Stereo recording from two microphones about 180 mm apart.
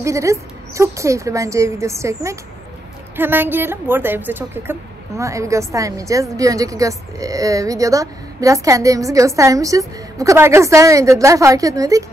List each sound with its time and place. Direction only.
0.0 s a woman's voice: 15° right (ahead or behind)